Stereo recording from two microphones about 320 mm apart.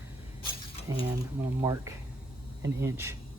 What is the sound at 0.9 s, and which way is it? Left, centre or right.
Speech, centre.